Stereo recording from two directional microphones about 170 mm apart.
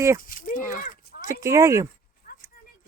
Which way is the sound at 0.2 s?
55° left (ahead or behind).